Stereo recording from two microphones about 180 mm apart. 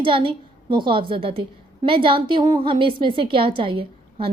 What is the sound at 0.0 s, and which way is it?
A woman's voice, 30° right (ahead or behind).